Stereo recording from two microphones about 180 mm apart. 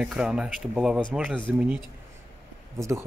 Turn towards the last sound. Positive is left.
turn(degrees=-15)  # may be behind; listen again after turning